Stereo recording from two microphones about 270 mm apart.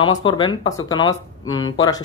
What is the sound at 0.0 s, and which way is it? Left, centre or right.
Speech, centre.